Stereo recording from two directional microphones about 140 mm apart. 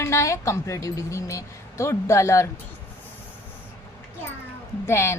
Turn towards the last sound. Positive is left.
turn(degrees=20)  # may be behind; listen again after turning